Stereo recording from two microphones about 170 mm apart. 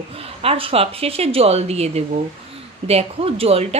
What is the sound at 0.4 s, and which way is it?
A woman's voice, 35° right (ahead or behind).